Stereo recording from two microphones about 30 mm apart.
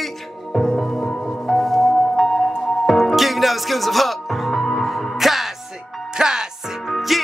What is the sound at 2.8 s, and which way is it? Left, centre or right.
Music, centre.